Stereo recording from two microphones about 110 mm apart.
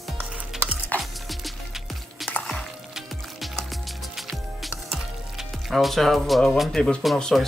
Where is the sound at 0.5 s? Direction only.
5° right (ahead or behind).